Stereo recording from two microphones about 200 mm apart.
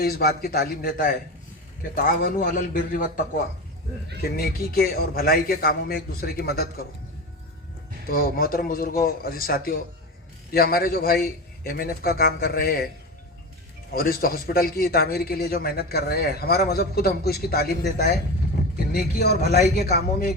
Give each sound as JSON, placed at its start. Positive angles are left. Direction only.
{"t": 0.0, "sound": "a man's voice", "side_deg": 50}
{"t": 8.1, "sound": "a man's voice", "side_deg": 45}
{"t": 13.9, "sound": "a man's voice", "side_deg": 45}